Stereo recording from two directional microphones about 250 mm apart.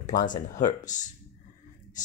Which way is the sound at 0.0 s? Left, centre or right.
Left.